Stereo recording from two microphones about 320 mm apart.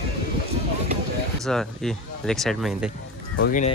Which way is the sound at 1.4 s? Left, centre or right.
Centre.